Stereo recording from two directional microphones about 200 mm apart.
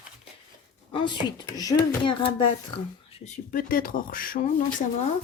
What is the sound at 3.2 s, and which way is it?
Speech, 40° left (ahead or behind).